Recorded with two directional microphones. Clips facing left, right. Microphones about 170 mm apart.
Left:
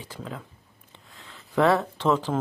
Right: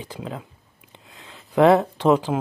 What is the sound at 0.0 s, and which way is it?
Speech, 20° right (ahead or behind).